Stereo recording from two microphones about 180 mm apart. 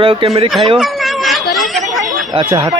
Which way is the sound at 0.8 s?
Centre (ahead or behind).